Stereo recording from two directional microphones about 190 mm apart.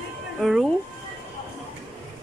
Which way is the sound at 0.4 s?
Centre (ahead or behind).